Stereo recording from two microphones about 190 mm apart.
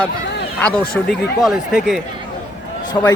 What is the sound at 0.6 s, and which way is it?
A man's voice, 5° left (ahead or behind).